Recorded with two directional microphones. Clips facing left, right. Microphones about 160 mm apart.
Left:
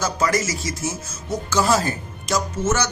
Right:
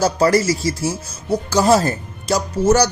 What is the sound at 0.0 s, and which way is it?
A man's voice, 35° right (ahead or behind).